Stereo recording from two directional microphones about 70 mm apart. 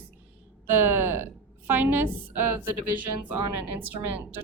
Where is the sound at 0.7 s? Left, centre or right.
Right.